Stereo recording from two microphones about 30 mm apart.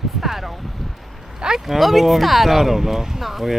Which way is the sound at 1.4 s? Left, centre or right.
Right.